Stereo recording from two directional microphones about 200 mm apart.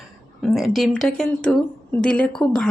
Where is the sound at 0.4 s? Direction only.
Centre (ahead or behind).